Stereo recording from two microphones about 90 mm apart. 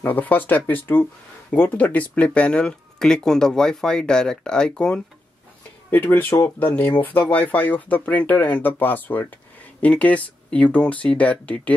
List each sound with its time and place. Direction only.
0.0 s speech: 20° left (ahead or behind)
6.4 s speech: 20° left (ahead or behind)